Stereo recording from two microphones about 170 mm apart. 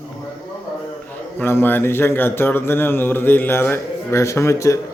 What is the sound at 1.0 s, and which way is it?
A man's voice, 10° left (ahead or behind).